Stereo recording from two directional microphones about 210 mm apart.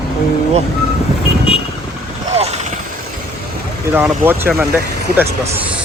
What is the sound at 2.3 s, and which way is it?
Vehicle, 30° right (ahead or behind).